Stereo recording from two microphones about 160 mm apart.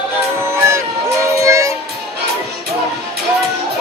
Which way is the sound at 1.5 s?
20° right (ahead or behind).